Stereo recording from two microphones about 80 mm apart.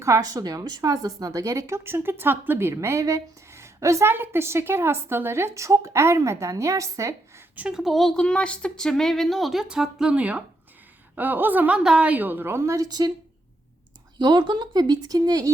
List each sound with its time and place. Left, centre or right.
0.0 s a woman's voice: right
7.7 s a woman's voice: centre; by 12.9 s right
14.2 s speech: right